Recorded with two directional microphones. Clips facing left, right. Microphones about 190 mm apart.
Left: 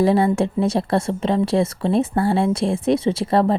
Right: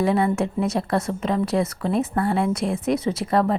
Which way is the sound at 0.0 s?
35° left (ahead or behind).